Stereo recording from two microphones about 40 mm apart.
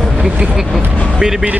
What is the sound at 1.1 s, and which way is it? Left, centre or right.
Speech, centre.